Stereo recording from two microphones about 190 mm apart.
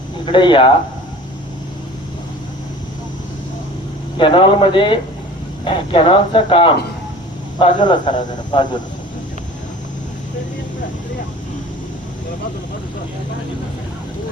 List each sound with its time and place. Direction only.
0.3 s speech: 25° left (ahead or behind)
4.2 s speech: 25° left (ahead or behind)